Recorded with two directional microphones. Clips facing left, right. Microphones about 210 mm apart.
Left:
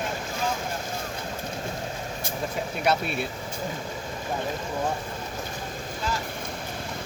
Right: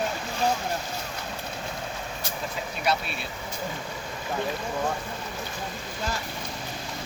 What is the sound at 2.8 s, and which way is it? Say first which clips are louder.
Vehicle: left 3 dB; 55° left (ahead or behind).